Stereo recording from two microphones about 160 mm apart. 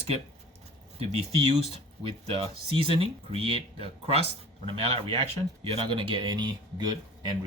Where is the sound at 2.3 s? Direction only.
35° right (ahead or behind).